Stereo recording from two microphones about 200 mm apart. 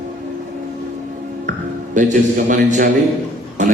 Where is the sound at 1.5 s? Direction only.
40° right (ahead or behind).